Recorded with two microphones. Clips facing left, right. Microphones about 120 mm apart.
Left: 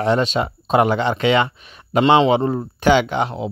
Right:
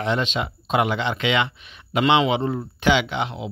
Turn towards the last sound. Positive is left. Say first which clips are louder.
# left 5 dB
turn(degrees=40)  # may be behind; listen again after turning